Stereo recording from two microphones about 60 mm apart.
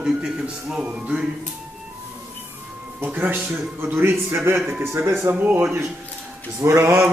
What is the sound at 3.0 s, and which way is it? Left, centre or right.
Speech, right.